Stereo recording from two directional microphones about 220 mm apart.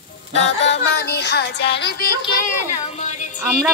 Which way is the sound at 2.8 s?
30° left (ahead or behind).